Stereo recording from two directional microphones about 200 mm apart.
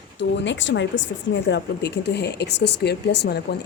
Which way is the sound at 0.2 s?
65° left (ahead or behind).